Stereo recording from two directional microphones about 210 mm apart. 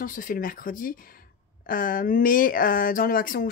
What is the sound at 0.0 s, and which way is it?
Speech, 40° left (ahead or behind).